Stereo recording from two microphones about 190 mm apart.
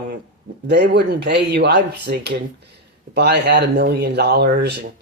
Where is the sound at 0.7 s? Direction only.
65° right (ahead or behind).